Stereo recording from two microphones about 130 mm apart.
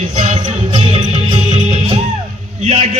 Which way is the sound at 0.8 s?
45° right (ahead or behind).